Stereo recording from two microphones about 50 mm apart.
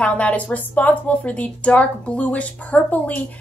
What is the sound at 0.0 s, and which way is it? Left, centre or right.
A woman's voice, left.